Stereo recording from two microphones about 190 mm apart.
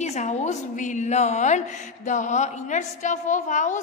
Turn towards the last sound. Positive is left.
turn(degrees=40)  # may be behind; listen again after turning